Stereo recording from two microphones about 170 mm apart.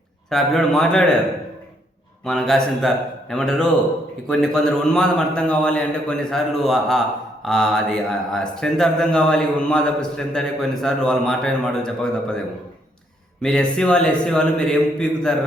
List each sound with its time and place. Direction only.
0.3 s speech: centre (ahead or behind)
2.2 s speech: centre (ahead or behind)
13.4 s speech: 5° left (ahead or behind)